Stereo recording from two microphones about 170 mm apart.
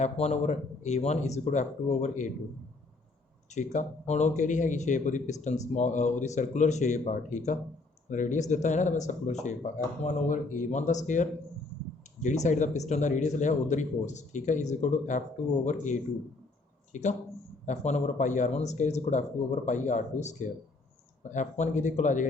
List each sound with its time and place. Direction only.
0.0 s speech: 40° left (ahead or behind)
3.5 s speech: 45° left (ahead or behind)